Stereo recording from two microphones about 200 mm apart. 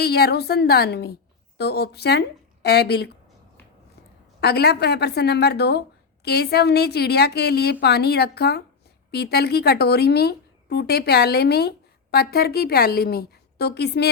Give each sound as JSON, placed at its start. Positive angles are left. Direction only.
{"t": 0.0, "sound": "a woman's voice", "side_deg": 55}
{"t": 4.4, "sound": "a woman's voice", "side_deg": 55}